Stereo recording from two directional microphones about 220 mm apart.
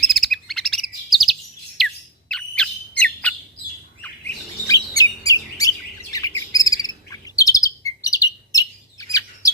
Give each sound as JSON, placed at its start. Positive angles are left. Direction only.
{"t": 0.1, "sound": "bird", "side_deg": 0}
{"t": 4.7, "sound": "chirp", "side_deg": 15}